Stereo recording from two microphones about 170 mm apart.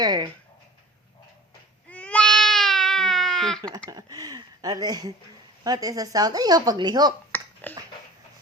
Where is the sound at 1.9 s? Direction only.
10° left (ahead or behind).